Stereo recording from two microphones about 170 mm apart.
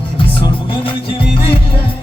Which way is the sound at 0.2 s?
30° left (ahead or behind).